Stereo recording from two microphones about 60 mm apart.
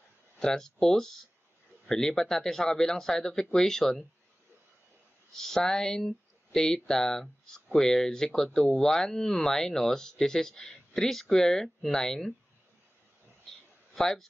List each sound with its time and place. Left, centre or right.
0.4 s speech: centre
5.3 s speech: centre
13.9 s a man's voice: centre